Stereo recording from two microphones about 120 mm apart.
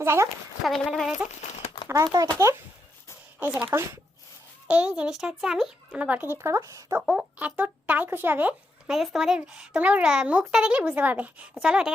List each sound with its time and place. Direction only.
0.0 s speech: 20° right (ahead or behind)
0.6 s speech: centre (ahead or behind)
2.1 s speech: 30° right (ahead or behind)
3.7 s speech: 25° right (ahead or behind)
4.7 s speech: 10° right (ahead or behind); by 7.0 s 30° right (ahead or behind)
7.0 s speech: centre (ahead or behind)
7.3 s speech: 15° right (ahead or behind)
8.9 s speech: 5° right (ahead or behind)